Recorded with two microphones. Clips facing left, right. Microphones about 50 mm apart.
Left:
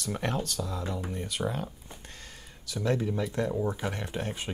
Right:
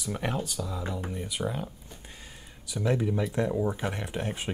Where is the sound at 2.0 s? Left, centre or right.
Centre.